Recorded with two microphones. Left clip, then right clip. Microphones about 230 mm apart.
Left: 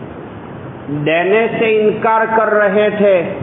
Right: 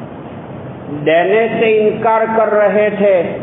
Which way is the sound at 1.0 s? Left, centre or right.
Left.